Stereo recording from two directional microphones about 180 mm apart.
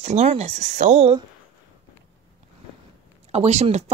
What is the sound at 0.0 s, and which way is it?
Speech, 40° right (ahead or behind).